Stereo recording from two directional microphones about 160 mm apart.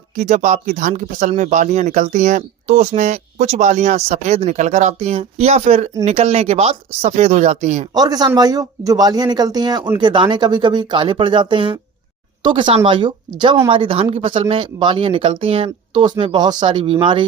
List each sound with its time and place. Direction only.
0.2 s speech: 50° right (ahead or behind)
7.9 s speech: 25° right (ahead or behind)